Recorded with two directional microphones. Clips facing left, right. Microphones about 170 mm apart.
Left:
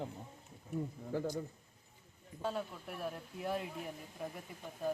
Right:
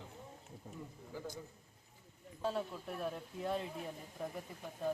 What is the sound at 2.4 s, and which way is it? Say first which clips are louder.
Speech: right 1 dB; centre (ahead or behind).